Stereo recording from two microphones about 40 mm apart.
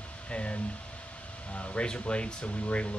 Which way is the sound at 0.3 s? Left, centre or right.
Left.